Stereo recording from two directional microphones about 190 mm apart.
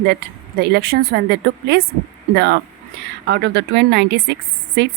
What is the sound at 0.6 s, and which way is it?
A woman's voice, 60° right (ahead or behind).